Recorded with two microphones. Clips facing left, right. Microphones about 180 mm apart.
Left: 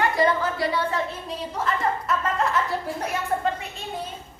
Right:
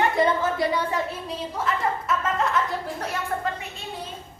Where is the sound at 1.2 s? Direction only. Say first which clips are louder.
Even; centre (ahead or behind).